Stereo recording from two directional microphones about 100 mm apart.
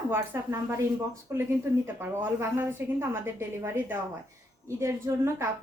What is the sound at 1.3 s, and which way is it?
Speech, 30° right (ahead or behind).